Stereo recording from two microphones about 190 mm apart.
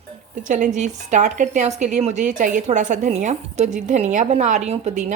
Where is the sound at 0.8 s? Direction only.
40° right (ahead or behind).